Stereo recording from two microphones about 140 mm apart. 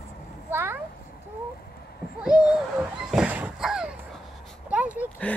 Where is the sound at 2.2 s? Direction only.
5° right (ahead or behind).